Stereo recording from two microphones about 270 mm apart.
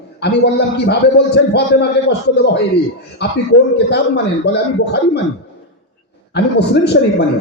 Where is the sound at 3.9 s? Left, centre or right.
Left.